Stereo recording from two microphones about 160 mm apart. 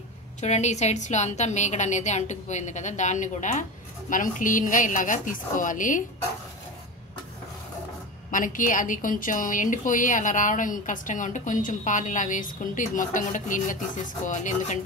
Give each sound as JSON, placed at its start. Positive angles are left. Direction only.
{"t": 0.4, "sound": "a woman's voice", "side_deg": 45}
{"t": 8.3, "sound": "a woman's voice", "side_deg": 55}